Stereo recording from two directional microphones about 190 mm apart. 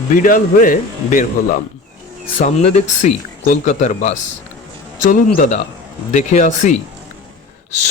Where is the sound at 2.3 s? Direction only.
35° left (ahead or behind).